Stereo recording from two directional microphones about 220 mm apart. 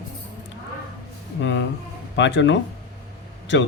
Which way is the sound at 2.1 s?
55° left (ahead or behind).